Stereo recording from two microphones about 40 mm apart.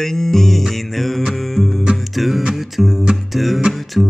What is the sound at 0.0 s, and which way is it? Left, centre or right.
Music, centre.